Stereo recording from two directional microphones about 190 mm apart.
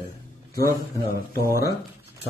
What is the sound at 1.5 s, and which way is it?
Speech, 15° right (ahead or behind).